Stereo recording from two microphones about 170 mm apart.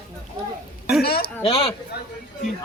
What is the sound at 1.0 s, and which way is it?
Speech, 65° left (ahead or behind).